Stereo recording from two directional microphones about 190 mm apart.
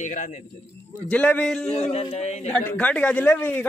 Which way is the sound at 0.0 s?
40° left (ahead or behind).